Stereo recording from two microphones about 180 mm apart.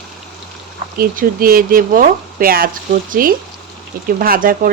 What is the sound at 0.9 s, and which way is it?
Speech, 55° right (ahead or behind).